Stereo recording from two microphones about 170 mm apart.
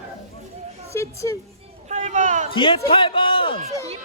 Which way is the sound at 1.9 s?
45° right (ahead or behind).